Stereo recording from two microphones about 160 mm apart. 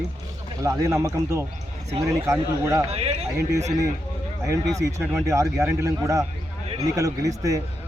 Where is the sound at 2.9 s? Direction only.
40° right (ahead or behind).